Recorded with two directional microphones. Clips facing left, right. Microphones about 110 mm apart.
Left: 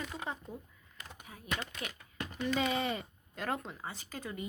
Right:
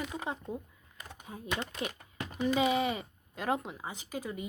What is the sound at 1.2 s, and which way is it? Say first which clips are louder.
Speech: right 3 dB; 25° right (ahead or behind).